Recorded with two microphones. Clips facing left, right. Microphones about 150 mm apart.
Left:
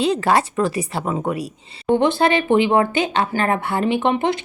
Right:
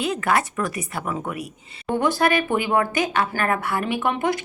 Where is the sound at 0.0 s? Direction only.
30° left (ahead or behind).